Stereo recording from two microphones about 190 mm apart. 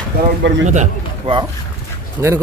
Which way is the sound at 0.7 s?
40° right (ahead or behind).